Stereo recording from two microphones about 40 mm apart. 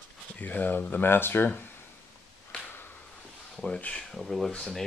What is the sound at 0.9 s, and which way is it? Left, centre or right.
Speech, left.